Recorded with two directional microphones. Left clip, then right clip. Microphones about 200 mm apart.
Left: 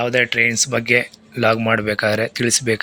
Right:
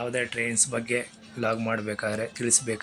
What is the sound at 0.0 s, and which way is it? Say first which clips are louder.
Speech: left 12 dB; 30° left (ahead or behind).